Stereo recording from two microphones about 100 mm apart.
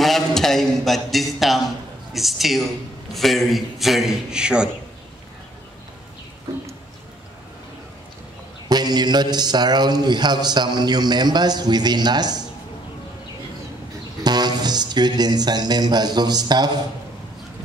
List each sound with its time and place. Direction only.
0.0 s a sound: centre (ahead or behind)
2.1 s a man's voice: centre (ahead or behind)
8.6 s a man's voice: 45° right (ahead or behind)
14.2 s a man's voice: 45° right (ahead or behind)